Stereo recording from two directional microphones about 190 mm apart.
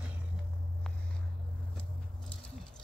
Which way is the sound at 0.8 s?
5° left (ahead or behind).